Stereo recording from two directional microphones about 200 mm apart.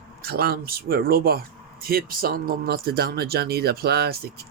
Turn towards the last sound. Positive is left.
turn(degrees=-50)  # may be behind; listen again after turning